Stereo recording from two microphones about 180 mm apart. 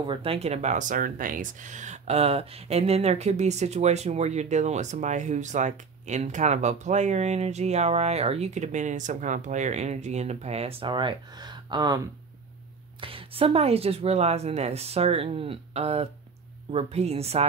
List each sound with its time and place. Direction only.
0.0 s speech: 30° right (ahead or behind)
13.0 s speech: 30° right (ahead or behind)